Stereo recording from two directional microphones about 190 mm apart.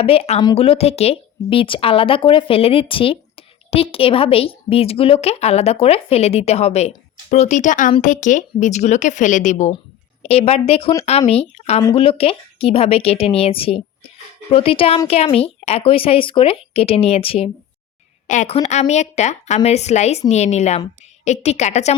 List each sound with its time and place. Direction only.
0.0 s speech: 30° left (ahead or behind)